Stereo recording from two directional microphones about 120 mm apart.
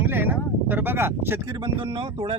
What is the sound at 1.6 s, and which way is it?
Speech, 45° right (ahead or behind).